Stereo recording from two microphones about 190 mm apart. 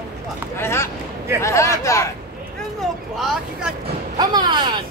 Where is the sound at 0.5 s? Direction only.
15° left (ahead or behind).